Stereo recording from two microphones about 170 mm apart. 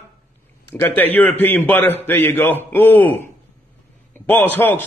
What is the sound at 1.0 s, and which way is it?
Speech, 10° left (ahead or behind).